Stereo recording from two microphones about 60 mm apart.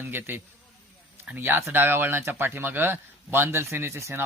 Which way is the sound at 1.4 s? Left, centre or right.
Right.